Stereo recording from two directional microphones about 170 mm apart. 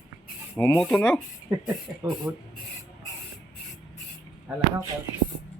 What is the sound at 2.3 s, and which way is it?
Speech, 15° right (ahead or behind).